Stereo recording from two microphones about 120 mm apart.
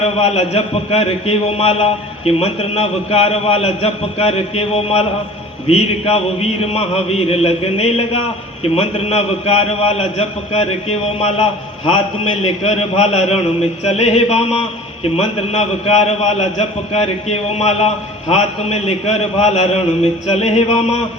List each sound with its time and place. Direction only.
0.0 s a man's voice: 60° left (ahead or behind)